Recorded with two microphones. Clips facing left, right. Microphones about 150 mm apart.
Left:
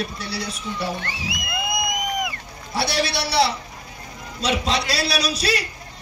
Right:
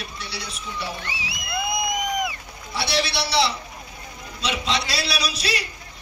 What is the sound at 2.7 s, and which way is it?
A man's voice, 40° left (ahead or behind).